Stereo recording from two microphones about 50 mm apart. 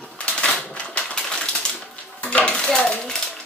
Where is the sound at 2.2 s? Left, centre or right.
Left.